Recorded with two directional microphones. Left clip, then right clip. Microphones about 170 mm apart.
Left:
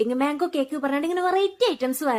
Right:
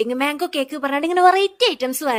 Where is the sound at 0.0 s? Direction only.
45° right (ahead or behind).